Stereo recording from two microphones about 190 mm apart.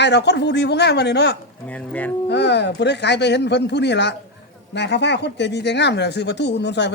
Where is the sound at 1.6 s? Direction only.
5° left (ahead or behind).